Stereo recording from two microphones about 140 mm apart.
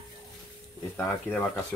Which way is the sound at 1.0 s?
15° left (ahead or behind).